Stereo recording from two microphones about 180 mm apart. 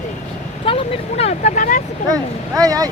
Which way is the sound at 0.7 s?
30° left (ahead or behind).